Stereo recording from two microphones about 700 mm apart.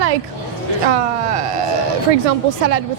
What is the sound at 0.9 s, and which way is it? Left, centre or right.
A woman's voice, right.